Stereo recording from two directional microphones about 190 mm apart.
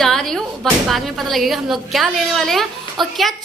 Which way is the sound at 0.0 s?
Centre (ahead or behind).